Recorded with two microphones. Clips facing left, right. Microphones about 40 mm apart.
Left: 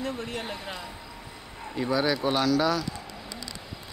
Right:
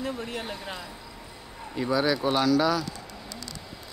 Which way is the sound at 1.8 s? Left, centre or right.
Centre.